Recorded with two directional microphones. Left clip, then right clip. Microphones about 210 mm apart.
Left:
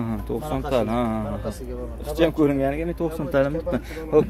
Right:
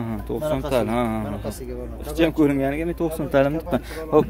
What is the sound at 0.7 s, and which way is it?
A man's voice, 15° right (ahead or behind).